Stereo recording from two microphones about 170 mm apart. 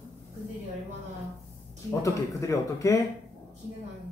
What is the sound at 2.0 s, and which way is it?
Speech, 20° left (ahead or behind).